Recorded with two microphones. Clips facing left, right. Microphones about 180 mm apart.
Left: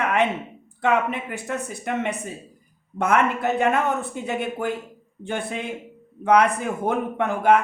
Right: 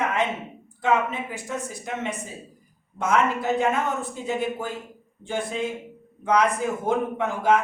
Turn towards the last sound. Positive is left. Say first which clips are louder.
# left 3 dB
turn(degrees=60)  # may be behind; listen again after turning